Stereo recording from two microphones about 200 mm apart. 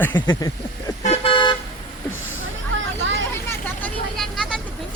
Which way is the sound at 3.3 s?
10° left (ahead or behind).